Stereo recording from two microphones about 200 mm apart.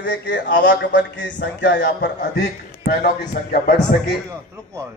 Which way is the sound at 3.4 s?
40° left (ahead or behind).